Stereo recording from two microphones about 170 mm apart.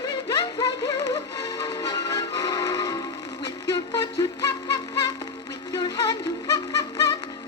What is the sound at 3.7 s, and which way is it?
Music, 25° left (ahead or behind).